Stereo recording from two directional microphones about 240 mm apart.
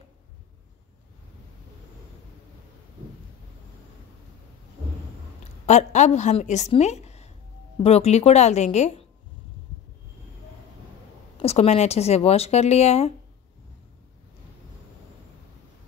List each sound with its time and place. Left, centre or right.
5.7 s a woman's voice: left
11.4 s speech: left